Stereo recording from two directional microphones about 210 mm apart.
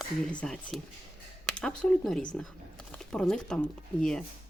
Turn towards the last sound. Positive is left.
turn(degrees=5)  # may be behind; listen again after turning